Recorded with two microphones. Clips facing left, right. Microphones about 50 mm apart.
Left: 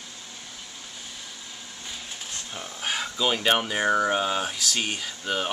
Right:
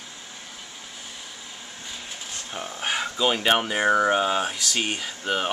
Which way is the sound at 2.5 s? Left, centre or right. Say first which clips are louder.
Right 3 dB; centre.